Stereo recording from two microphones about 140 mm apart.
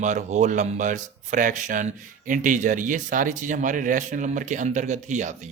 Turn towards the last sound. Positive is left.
turn(degrees=-60)  # may be behind; listen again after turning